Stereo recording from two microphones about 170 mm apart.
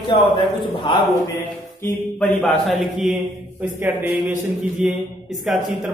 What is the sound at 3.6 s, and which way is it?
Speech, 10° right (ahead or behind).